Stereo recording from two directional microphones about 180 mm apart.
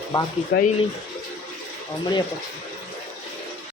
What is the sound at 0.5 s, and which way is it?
Speech, 60° left (ahead or behind).